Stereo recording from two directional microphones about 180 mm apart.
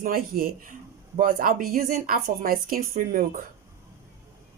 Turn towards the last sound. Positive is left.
turn(degrees=-50)  # may be behind; listen again after turning